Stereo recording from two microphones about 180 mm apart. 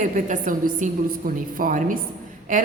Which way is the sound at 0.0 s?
45° right (ahead or behind).